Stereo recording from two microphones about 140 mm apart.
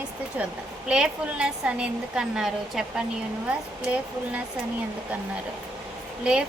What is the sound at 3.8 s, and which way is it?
Speech, 10° right (ahead or behind).